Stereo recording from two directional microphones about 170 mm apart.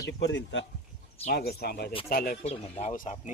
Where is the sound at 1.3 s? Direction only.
70° left (ahead or behind).